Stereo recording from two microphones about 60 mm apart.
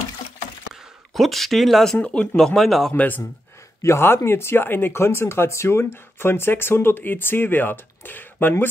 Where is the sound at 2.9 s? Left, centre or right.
Left.